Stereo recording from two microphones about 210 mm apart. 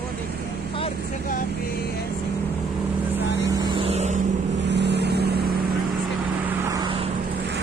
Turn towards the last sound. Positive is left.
turn(degrees=-20)  # may be behind; listen again after turning